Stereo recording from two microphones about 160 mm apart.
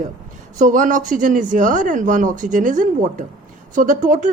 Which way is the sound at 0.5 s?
55° right (ahead or behind).